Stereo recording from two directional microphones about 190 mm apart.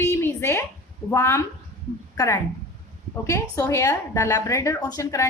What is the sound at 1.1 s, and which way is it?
A woman's voice, 15° left (ahead or behind).